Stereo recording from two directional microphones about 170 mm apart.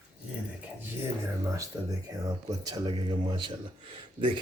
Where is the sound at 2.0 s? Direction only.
20° right (ahead or behind).